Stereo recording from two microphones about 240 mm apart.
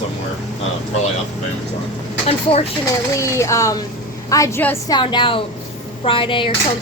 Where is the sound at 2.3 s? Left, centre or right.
Left.